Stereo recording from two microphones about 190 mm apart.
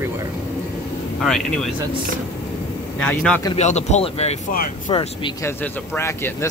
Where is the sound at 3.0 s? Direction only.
5° left (ahead or behind).